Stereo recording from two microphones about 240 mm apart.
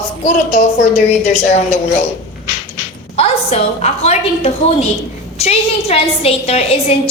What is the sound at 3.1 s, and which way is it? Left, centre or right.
A woman's voice, left.